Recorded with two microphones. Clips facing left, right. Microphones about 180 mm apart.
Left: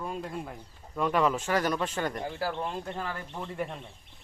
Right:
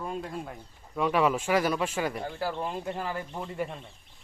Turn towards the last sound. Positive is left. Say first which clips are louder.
# right 1 dB
turn(degrees=0)  # may be behind; listen again after turning